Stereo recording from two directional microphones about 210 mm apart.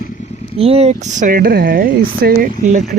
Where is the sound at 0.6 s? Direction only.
30° right (ahead or behind).